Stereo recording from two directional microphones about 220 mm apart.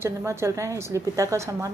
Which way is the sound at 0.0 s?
10° right (ahead or behind).